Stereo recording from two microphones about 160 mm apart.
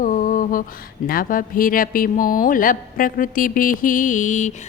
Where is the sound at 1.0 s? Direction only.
65° left (ahead or behind).